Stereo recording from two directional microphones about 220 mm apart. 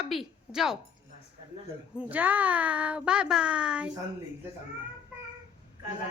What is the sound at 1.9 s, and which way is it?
Speech, 5° right (ahead or behind).